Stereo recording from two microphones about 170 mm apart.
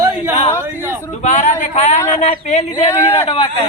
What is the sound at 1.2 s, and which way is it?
Speech, 45° left (ahead or behind).